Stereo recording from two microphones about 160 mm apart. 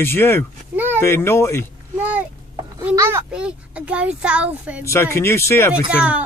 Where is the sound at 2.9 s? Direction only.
15° right (ahead or behind).